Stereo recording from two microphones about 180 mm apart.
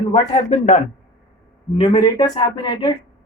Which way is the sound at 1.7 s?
20° left (ahead or behind).